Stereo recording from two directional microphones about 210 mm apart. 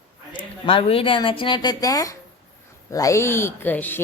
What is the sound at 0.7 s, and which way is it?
Speech, 25° left (ahead or behind).